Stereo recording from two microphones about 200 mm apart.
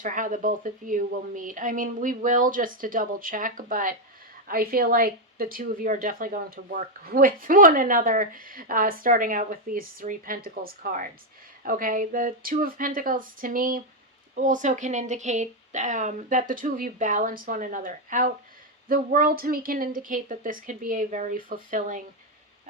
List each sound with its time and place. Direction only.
0.0 s speech: 40° right (ahead or behind)